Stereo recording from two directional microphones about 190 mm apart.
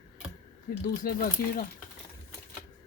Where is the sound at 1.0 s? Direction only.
50° left (ahead or behind).